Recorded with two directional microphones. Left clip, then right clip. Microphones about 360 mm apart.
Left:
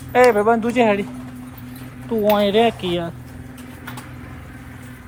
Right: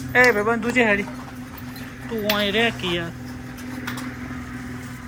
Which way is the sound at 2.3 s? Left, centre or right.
Centre.